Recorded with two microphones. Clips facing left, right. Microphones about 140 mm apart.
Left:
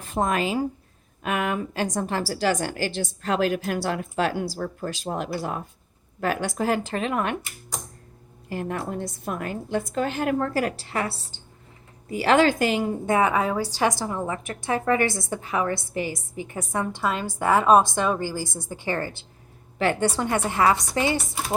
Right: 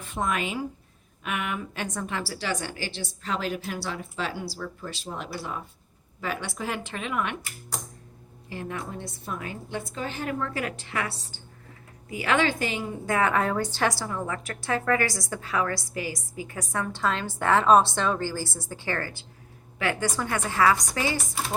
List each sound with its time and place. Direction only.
0.0 s a woman's voice: 40° left (ahead or behind)
8.4 s a woman's voice: 45° left (ahead or behind)
13.1 s a woman's voice: 15° left (ahead or behind)